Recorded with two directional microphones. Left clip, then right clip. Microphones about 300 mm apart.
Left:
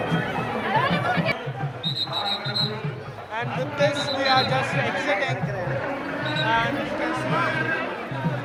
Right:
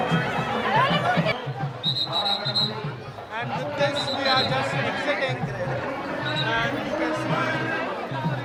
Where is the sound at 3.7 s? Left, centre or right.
Centre.